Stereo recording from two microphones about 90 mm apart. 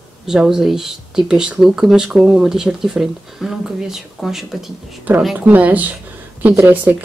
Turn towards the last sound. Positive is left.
turn(degrees=-25)  # may be behind; listen again after turning